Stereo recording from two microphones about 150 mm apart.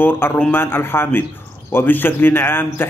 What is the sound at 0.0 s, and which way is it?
A man's voice, 10° left (ahead or behind).